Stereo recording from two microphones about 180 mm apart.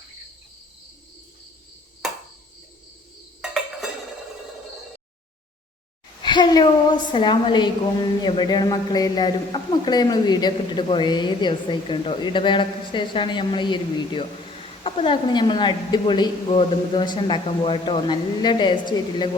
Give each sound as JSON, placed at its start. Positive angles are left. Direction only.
{"t": 6.2, "sound": "a man's voice", "side_deg": 25}